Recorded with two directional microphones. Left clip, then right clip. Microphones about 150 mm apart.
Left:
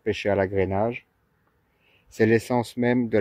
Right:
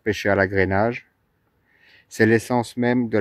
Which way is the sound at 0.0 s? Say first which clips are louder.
Right 4 dB; 20° right (ahead or behind).